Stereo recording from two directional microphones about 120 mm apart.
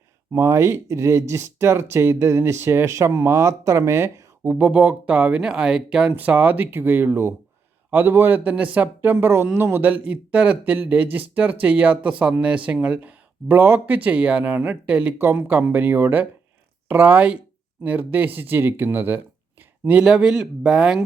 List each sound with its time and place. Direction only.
0.3 s speech: 25° right (ahead or behind); by 21.0 s 5° right (ahead or behind)